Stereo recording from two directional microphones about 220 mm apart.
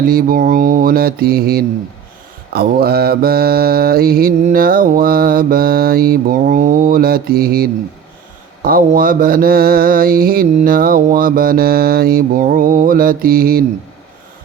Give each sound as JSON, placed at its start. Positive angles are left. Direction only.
{"t": 0.0, "sound": "mantra", "side_deg": -40}